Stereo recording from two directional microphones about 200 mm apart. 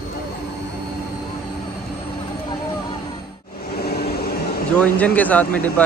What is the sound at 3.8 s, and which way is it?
Vehicle, 50° left (ahead or behind).